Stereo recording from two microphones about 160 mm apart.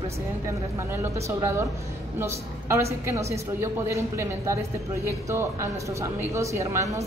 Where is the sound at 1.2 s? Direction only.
15° right (ahead or behind).